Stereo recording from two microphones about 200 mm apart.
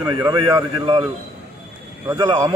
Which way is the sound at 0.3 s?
25° right (ahead or behind).